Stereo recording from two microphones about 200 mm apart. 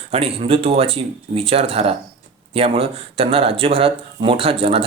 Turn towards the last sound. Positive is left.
turn(degrees=-30)  # may be behind; listen again after turning